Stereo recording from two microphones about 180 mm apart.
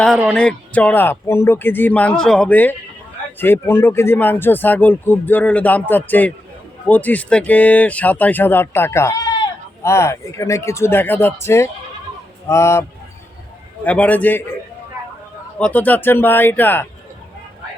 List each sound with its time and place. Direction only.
0.0 s a sound: centre (ahead or behind)
0.4 s speech: 5° left (ahead or behind)
13.8 s speech: 10° left (ahead or behind)